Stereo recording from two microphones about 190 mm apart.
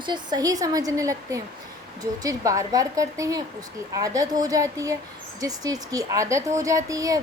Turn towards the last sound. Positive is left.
turn(degrees=-15)  # may be behind; listen again after turning